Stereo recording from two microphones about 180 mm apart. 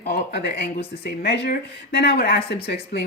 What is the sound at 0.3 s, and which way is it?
Speech, 65° left (ahead or behind).